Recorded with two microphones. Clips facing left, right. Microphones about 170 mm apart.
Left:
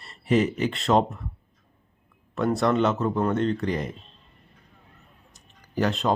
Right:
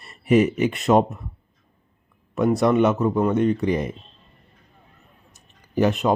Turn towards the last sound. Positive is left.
turn(degrees=-15)  # may be behind; listen again after turning